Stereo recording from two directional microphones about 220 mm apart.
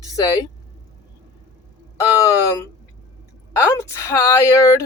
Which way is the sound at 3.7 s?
15° left (ahead or behind).